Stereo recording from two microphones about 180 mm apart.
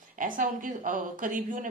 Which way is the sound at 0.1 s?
50° right (ahead or behind).